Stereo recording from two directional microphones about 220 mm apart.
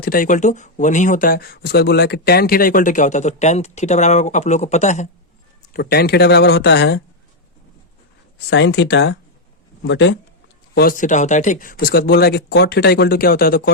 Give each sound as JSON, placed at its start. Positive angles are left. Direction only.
{"t": 0.0, "sound": "speech", "side_deg": 40}
{"t": 5.7, "sound": "speech", "side_deg": 45}
{"t": 8.4, "sound": "speech", "side_deg": 55}
{"t": 10.8, "sound": "speech", "side_deg": 40}